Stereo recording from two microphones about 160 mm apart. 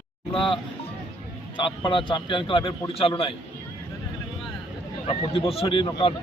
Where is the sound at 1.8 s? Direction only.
30° left (ahead or behind).